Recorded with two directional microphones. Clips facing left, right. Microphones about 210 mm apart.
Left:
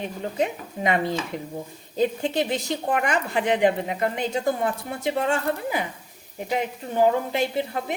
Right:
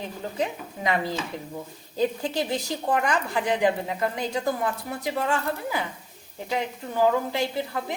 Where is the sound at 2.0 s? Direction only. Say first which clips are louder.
Left 2 dB; 20° left (ahead or behind).